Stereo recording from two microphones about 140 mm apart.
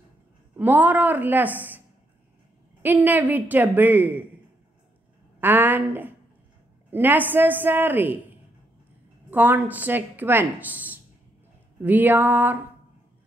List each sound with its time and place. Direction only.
0.6 s speech: 10° right (ahead or behind)
2.8 s speech: 10° right (ahead or behind)
5.4 s speech: 15° right (ahead or behind)
9.3 s speech: 10° right (ahead or behind)